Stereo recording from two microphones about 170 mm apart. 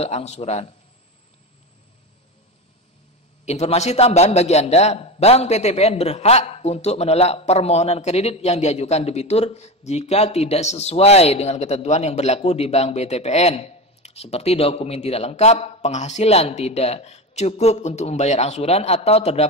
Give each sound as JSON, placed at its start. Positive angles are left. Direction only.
{"t": 0.0, "sound": "a man's voice", "side_deg": 40}
{"t": 3.4, "sound": "a man's voice", "side_deg": 40}